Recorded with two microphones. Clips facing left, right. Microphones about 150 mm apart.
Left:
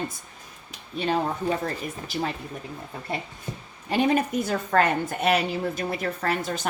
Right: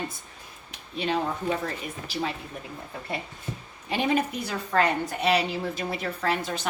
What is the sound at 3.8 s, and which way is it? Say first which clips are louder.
Speech: left 3 dB; 45° left (ahead or behind).